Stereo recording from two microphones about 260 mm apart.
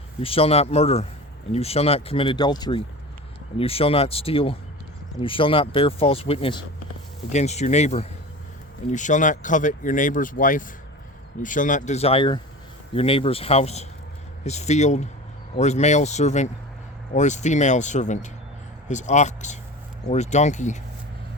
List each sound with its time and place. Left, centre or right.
0.2 s speech: left